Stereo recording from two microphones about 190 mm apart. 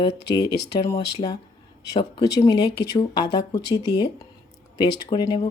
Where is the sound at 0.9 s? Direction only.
20° left (ahead or behind).